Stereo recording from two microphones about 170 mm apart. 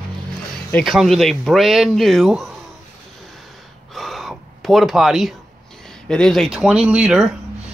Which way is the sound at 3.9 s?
Centre (ahead or behind).